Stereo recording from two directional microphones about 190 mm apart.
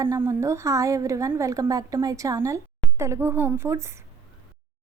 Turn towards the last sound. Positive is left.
turn(degrees=-15)  # may be behind; listen again after turning